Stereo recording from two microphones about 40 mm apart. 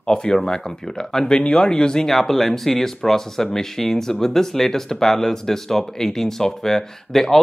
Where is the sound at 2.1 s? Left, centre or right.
Centre.